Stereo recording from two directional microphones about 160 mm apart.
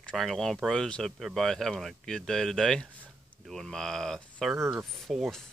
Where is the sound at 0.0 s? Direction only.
Centre (ahead or behind).